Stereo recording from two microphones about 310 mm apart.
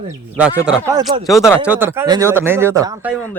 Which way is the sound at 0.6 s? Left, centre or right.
Centre.